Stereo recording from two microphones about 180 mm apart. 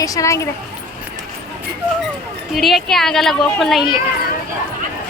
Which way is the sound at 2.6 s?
Centre (ahead or behind).